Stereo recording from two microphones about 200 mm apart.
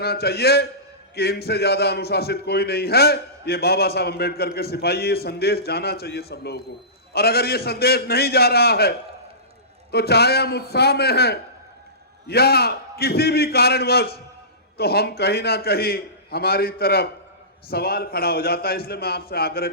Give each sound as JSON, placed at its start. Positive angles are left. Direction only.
{"t": 0.0, "sound": "a man's voice", "side_deg": 50}